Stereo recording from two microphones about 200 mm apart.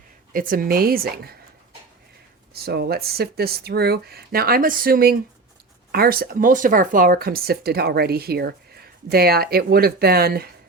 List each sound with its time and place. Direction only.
0.3 s speech: 45° right (ahead or behind)
2.5 s speech: 50° right (ahead or behind)